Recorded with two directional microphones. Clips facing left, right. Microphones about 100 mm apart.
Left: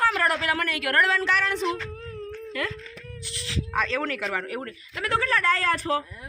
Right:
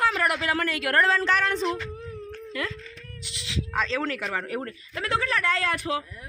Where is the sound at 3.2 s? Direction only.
20° right (ahead or behind).